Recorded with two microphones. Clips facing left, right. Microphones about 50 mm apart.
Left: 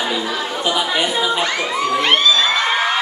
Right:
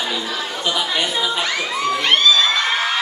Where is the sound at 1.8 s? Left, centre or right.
Centre.